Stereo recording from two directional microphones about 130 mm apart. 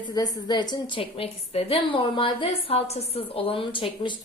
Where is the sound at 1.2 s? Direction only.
45° left (ahead or behind).